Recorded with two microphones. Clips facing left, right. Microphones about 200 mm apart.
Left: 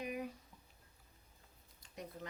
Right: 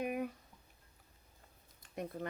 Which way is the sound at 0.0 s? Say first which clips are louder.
Right 5 dB; 55° right (ahead or behind).